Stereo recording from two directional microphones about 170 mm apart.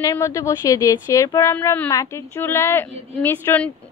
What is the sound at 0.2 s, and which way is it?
A woman's voice, 20° left (ahead or behind).